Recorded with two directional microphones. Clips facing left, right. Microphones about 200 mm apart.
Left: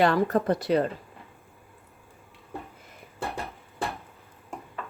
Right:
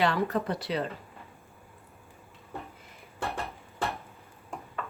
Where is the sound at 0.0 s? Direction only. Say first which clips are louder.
Left 5 dB; 45° left (ahead or behind).